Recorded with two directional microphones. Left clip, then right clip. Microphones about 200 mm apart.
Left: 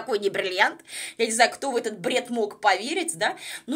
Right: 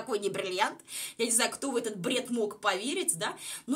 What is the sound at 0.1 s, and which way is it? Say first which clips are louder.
Speech: left 7 dB; 15° left (ahead or behind).